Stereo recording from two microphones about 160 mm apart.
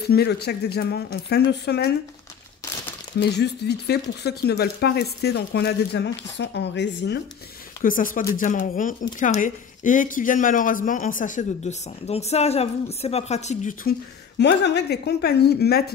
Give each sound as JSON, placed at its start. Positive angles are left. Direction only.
{"t": 0.1, "sound": "speech", "side_deg": 85}
{"t": 3.2, "sound": "speech", "side_deg": 90}
{"t": 7.8, "sound": "speech", "side_deg": 60}
{"t": 14.4, "sound": "speech", "side_deg": 90}